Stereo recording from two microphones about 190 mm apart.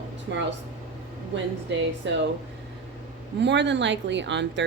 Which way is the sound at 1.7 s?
70° right (ahead or behind).